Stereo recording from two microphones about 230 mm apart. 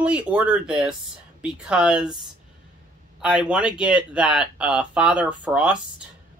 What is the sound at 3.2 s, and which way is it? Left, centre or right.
Speech, centre.